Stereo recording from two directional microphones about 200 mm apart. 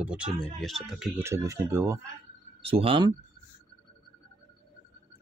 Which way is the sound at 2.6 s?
30° right (ahead or behind).